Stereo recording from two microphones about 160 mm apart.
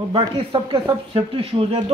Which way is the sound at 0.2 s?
30° right (ahead or behind).